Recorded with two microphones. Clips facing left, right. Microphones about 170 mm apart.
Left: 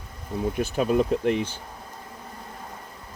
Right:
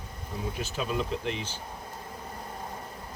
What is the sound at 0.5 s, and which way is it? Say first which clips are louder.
Speech: left 9 dB; 55° left (ahead or behind).